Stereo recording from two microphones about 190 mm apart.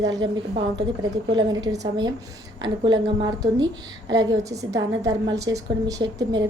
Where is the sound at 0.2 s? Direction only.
25° right (ahead or behind).